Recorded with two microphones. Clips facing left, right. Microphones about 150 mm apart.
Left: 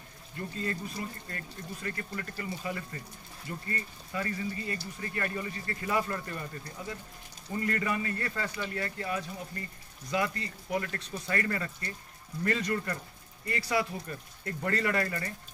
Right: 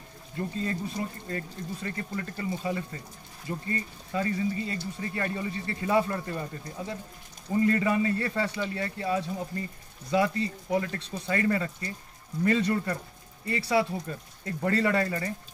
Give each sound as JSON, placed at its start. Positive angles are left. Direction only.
{"t": 0.4, "sound": "speech", "side_deg": -20}